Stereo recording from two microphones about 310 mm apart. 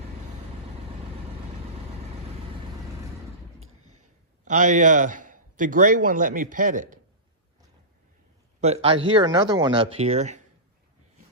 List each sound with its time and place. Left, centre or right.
3.6 s a sound: right
4.4 s a man's voice: right
8.6 s speech: centre